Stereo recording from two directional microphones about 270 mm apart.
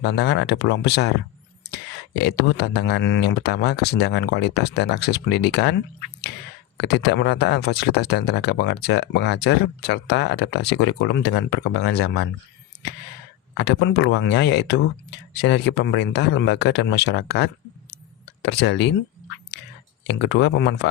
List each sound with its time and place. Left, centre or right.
0.0 s speech: left
6.7 s speech: left
13.6 s speech: left
20.1 s speech: left